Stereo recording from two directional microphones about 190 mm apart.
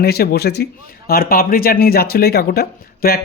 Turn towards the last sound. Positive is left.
turn(degrees=55)  # may be behind; listen again after turning